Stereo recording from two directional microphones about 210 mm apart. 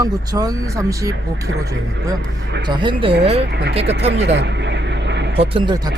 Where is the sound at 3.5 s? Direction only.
50° right (ahead or behind).